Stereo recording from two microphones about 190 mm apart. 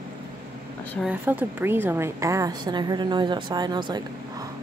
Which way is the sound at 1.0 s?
10° right (ahead or behind).